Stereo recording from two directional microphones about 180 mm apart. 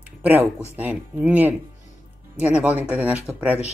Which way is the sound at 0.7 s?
10° right (ahead or behind).